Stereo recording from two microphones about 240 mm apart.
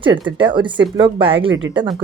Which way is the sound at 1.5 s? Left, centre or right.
Right.